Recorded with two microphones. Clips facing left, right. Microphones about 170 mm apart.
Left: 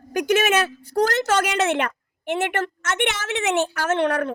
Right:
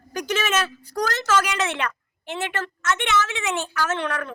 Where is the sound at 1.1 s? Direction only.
55° left (ahead or behind).